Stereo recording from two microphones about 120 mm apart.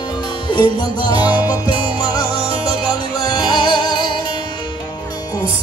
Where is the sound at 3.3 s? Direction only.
40° left (ahead or behind).